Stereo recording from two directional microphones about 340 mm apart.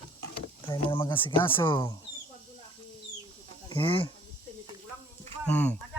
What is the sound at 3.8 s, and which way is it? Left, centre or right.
Speech, centre.